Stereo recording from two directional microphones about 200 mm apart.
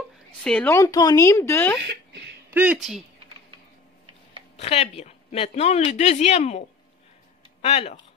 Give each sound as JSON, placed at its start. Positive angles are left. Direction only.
{"t": 0.4, "sound": "a woman's voice", "side_deg": 5}
{"t": 2.5, "sound": "speech", "side_deg": -5}
{"t": 4.6, "sound": "speech", "side_deg": 30}
{"t": 7.6, "sound": "speech", "side_deg": 30}